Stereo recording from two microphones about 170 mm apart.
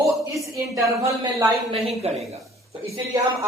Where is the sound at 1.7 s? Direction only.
35° right (ahead or behind).